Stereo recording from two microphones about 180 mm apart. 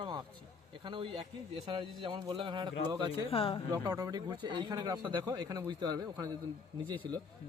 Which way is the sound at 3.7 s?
20° right (ahead or behind).